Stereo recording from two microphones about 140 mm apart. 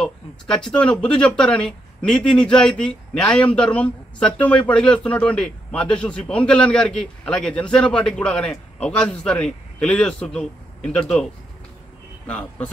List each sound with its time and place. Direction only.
0.0 s a man's voice: 5° left (ahead or behind)
12.3 s a man's voice: 10° left (ahead or behind)